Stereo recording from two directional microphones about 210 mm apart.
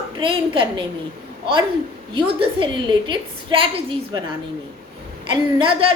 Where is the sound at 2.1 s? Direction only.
25° right (ahead or behind).